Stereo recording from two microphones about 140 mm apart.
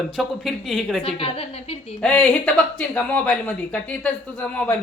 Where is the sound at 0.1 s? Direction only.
Centre (ahead or behind).